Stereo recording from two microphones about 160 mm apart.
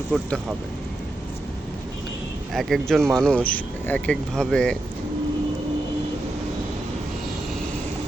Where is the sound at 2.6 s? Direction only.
Centre (ahead or behind).